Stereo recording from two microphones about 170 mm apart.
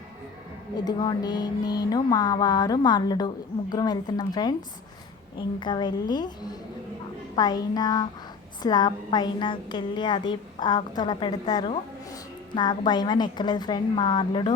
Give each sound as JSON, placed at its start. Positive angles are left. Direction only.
{"t": 0.9, "sound": "speech", "side_deg": 25}
{"t": 5.5, "sound": "speech", "side_deg": 25}
{"t": 7.3, "sound": "speech", "side_deg": 25}